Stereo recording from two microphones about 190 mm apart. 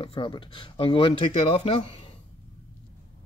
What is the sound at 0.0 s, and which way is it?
Speech, 25° left (ahead or behind).